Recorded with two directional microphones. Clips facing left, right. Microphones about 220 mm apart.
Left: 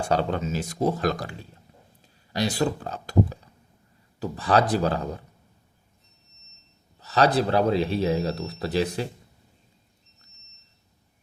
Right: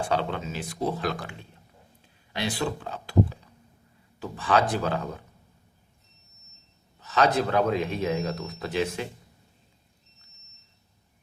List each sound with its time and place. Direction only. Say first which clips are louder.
0.1 s speech: left 3 dB; 40° left (ahead or behind)
7.0 s speech: left 2 dB; 35° left (ahead or behind)